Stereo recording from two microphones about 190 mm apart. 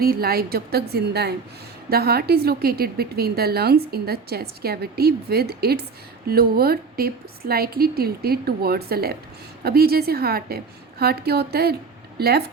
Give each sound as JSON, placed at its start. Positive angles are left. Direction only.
{"t": 0.0, "sound": "a woman's voice", "side_deg": -55}